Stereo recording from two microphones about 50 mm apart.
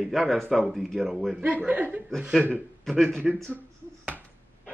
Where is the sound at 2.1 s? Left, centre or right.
Centre.